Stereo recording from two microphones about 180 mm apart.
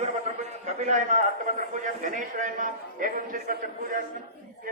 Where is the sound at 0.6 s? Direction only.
40° right (ahead or behind).